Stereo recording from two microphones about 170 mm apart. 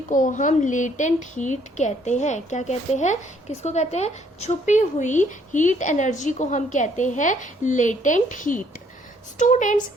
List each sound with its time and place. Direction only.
0.1 s a woman's voice: 50° left (ahead or behind)